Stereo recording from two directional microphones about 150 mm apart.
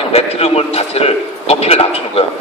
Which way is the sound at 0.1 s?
40° left (ahead or behind).